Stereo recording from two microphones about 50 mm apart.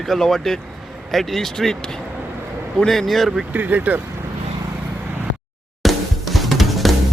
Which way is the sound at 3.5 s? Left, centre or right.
Right.